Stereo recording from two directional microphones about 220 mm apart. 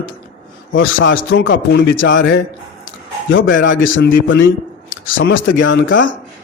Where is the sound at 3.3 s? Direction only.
60° left (ahead or behind).